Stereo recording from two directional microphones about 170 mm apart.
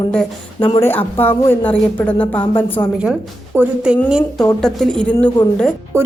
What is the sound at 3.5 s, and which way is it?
Speech, 5° right (ahead or behind).